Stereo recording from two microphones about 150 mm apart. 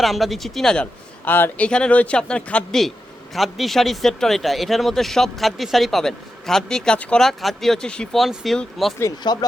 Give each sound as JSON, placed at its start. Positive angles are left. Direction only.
{"t": 0.0, "sound": "speech", "side_deg": 0}
{"t": 9.0, "sound": "speech", "side_deg": 25}